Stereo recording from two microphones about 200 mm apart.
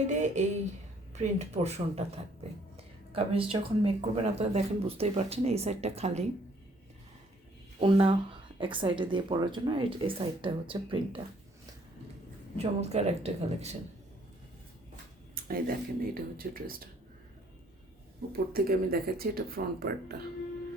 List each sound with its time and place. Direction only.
0.1 s speech: 35° right (ahead or behind)
7.8 s speech: 25° right (ahead or behind)
12.5 s speech: 30° right (ahead or behind)
15.4 s speech: 45° right (ahead or behind)
18.3 s speech: 50° right (ahead or behind)